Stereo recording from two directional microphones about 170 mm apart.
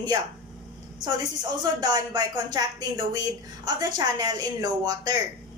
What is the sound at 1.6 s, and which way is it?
Speech, 25° right (ahead or behind).